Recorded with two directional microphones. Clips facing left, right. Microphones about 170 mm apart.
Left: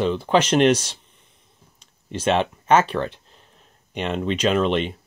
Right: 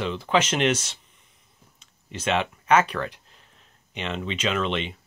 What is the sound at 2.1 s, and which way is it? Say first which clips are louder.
Speech: left 5 dB; 35° left (ahead or behind).